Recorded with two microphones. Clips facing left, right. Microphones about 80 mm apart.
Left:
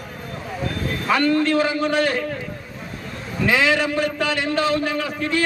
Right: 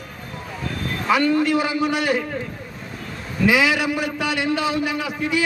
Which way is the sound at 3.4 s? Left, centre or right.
Centre.